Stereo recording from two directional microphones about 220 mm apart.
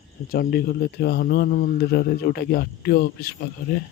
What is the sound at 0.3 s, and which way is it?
A man's voice, 45° left (ahead or behind).